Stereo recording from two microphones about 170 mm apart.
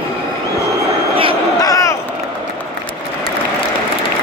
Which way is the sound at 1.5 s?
20° left (ahead or behind).